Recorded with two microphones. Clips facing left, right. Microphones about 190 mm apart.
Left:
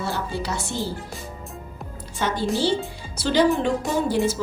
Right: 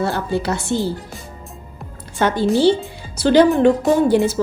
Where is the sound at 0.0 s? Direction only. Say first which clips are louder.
Right 7 dB; 60° right (ahead or behind).